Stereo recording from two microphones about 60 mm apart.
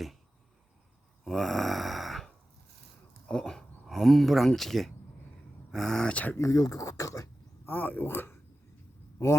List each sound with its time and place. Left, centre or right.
1.2 s a sound: centre
3.2 s speech: centre
3.8 s speech: centre
6.3 s speech: left
7.6 s speech: left